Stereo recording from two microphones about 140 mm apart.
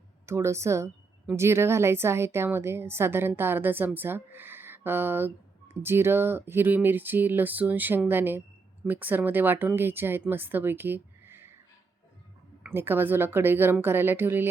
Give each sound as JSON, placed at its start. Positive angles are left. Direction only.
{"t": 0.3, "sound": "a woman's voice", "side_deg": -20}
{"t": 12.7, "sound": "a woman's voice", "side_deg": -15}